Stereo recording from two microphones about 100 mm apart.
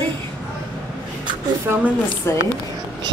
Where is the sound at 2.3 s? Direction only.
25° left (ahead or behind).